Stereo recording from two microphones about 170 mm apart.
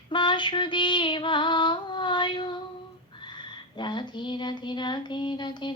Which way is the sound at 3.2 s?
25° left (ahead or behind).